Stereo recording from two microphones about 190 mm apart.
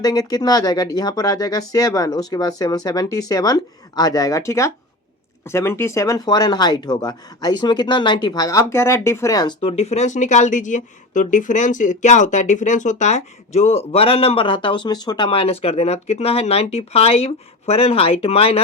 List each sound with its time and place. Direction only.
0.0 s speech: 20° left (ahead or behind)
9.6 s speech: 30° left (ahead or behind)